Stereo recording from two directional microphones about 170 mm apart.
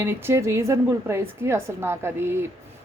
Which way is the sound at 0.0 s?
15° right (ahead or behind).